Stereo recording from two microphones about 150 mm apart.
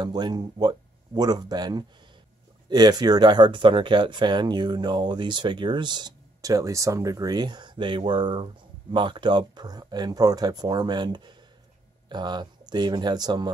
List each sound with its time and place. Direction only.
0.0 s speech: 30° right (ahead or behind)